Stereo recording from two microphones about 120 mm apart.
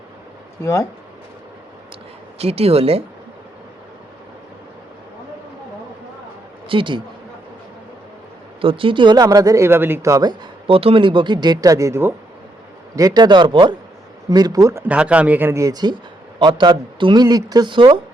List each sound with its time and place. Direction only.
0.6 s speech: 30° left (ahead or behind)
2.4 s speech: 55° right (ahead or behind)
6.7 s speech: 45° right (ahead or behind)
8.6 s speech: 45° right (ahead or behind)
9.2 s speech: 30° right (ahead or behind)
10.7 s speech: 50° right (ahead or behind); by 12.1 s 25° right (ahead or behind)
13.0 s speech: 35° right (ahead or behind)
14.8 s speech: 10° right (ahead or behind); by 18.0 s 45° right (ahead or behind)